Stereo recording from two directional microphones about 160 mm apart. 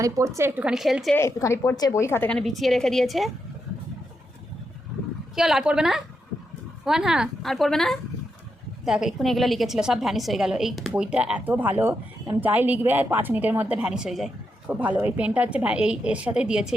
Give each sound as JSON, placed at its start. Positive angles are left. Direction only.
{"t": 0.0, "sound": "a woman's voice", "side_deg": -20}
{"t": 1.1, "sound": "a woman's voice", "side_deg": 15}
{"t": 2.4, "sound": "a woman's voice", "side_deg": 0}
{"t": 5.3, "sound": "a woman's voice", "side_deg": -5}